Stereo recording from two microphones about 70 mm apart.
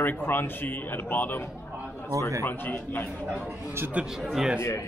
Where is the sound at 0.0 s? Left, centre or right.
Left.